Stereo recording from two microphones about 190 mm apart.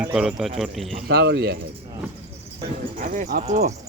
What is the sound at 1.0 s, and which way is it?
Speech, 60° right (ahead or behind).